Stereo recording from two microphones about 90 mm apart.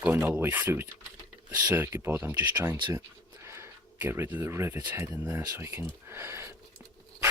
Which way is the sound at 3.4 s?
30° right (ahead or behind).